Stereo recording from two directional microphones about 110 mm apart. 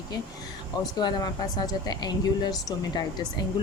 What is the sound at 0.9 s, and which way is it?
Speech, 40° left (ahead or behind).